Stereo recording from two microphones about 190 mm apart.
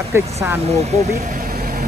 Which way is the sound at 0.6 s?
35° right (ahead or behind).